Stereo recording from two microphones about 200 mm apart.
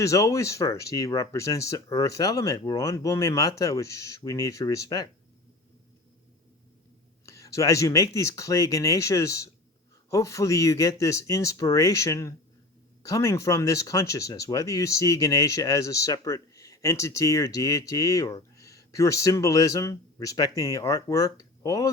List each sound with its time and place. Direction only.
0.0 s speech: 15° left (ahead or behind)
7.3 s speech: 15° left (ahead or behind)